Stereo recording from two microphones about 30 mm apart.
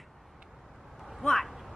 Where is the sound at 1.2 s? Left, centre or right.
Centre.